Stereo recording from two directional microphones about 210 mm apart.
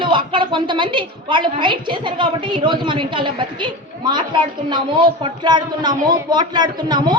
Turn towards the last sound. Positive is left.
turn(degrees=-20)  # may be behind; listen again after turning